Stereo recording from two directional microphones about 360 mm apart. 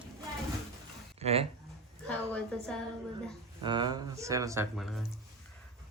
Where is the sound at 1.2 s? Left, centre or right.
Centre.